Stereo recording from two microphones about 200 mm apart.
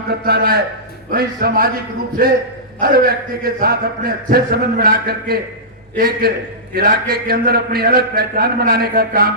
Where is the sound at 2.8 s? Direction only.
50° right (ahead or behind).